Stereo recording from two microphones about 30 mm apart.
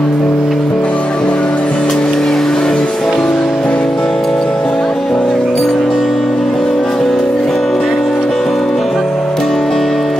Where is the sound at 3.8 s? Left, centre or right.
Centre.